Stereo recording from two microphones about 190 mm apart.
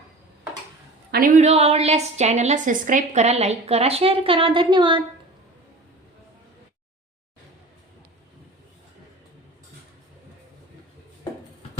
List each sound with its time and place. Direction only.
1.4 s a woman's voice: 35° right (ahead or behind)